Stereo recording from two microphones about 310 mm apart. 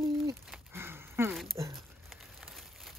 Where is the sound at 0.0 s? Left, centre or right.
Centre.